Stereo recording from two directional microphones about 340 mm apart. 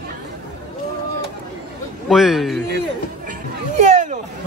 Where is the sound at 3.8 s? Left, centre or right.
Right.